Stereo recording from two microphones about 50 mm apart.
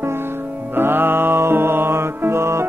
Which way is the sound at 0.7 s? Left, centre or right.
Right.